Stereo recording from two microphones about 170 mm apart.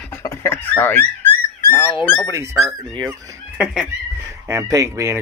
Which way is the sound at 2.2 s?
20° right (ahead or behind).